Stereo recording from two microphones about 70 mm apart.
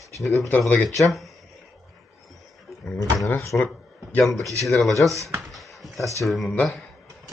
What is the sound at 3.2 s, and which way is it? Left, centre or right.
Speech, left.